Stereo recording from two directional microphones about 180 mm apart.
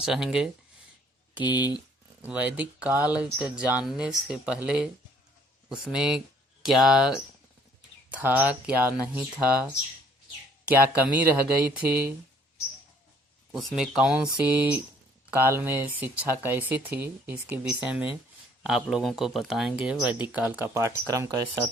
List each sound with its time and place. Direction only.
0.0 s speech: 5° right (ahead or behind)
2.2 s speech: 10° right (ahead or behind)
8.1 s speech: 10° right (ahead or behind)
10.7 s speech: 10° right (ahead or behind)
13.5 s speech: centre (ahead or behind); by 21.6 s 20° right (ahead or behind)